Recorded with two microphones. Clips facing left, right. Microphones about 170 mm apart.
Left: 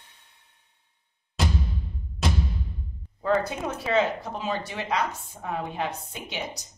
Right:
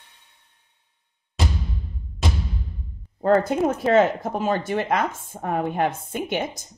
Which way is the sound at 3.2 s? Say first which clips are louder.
Right 7 dB; 50° right (ahead or behind).